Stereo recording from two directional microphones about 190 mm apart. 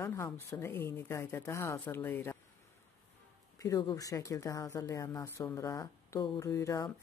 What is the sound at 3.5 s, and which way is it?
Speech, 15° left (ahead or behind).